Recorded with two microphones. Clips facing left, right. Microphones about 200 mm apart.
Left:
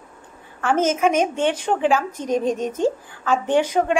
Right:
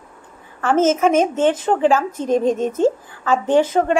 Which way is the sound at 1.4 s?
5° right (ahead or behind).